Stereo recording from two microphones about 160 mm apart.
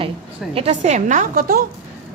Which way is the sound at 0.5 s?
45° right (ahead or behind).